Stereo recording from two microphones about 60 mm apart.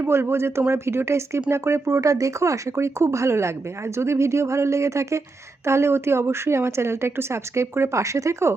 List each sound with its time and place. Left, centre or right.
0.0 s speech: right